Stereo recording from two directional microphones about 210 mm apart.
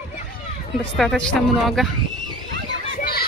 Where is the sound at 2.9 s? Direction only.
45° left (ahead or behind).